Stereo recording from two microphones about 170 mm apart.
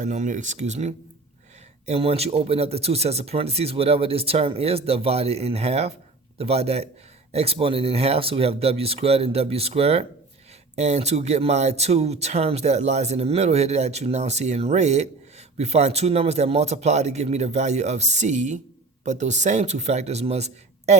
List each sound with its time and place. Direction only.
0.0 s speech: 45° right (ahead or behind)